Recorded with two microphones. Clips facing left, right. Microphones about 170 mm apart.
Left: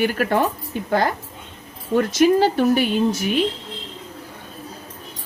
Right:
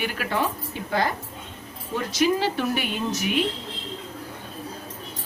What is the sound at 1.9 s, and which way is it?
A woman's voice, 50° left (ahead or behind).